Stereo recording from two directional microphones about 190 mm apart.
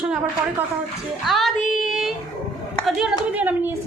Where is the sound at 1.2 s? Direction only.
Centre (ahead or behind).